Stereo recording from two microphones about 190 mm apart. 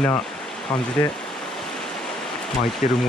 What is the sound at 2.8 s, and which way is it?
Speech, 45° left (ahead or behind).